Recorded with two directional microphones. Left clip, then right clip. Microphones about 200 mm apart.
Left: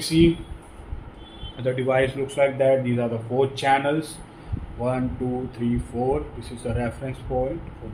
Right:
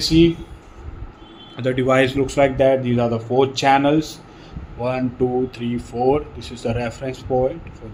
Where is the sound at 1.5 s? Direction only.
50° right (ahead or behind).